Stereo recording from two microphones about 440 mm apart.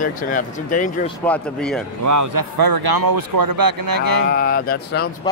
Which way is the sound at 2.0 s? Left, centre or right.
Right.